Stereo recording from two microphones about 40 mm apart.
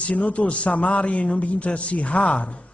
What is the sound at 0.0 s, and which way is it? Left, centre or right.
A man's voice, left.